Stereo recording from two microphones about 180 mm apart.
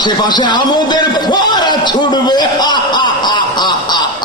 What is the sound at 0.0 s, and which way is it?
Speech, 25° left (ahead or behind).